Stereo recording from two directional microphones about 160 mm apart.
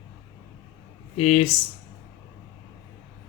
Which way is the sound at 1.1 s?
40° left (ahead or behind).